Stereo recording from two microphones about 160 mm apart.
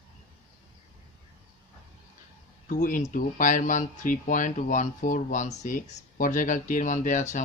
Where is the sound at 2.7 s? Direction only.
55° left (ahead or behind).